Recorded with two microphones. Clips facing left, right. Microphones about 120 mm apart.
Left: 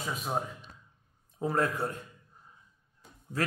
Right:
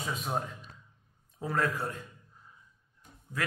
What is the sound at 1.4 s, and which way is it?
Speech, 25° left (ahead or behind).